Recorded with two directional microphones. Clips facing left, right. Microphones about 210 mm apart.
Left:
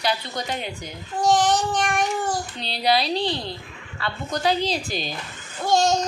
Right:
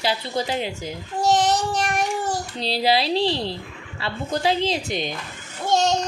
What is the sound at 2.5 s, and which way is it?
A woman's voice, 30° right (ahead or behind).